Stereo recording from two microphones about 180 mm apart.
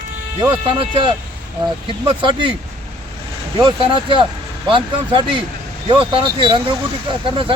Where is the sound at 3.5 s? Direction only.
25° right (ahead or behind).